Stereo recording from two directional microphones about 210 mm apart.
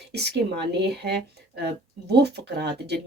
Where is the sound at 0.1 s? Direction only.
50° right (ahead or behind).